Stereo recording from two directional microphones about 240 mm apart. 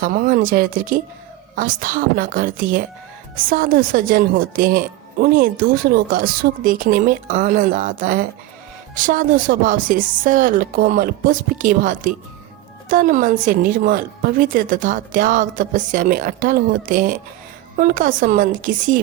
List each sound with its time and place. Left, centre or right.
0.0 s a woman's voice: right